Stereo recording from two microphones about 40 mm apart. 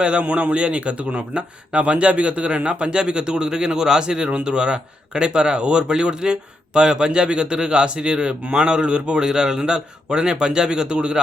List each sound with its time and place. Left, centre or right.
0.0 s speech: right